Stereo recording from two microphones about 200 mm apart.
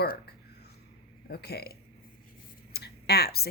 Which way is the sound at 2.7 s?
50° left (ahead or behind).